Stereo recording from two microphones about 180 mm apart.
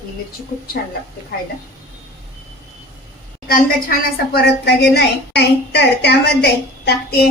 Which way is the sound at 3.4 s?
55° left (ahead or behind).